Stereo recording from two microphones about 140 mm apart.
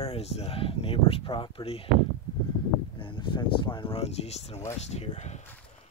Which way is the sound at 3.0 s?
35° left (ahead or behind).